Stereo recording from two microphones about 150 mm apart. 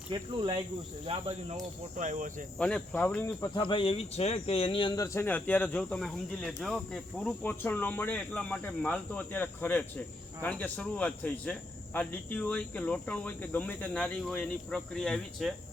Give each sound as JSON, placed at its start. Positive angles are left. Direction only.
{"t": 0.1, "sound": "speech", "side_deg": -30}
{"t": 2.0, "sound": "speech", "side_deg": -55}
{"t": 2.6, "sound": "speech", "side_deg": 5}
{"t": 3.5, "sound": "speech", "side_deg": 30}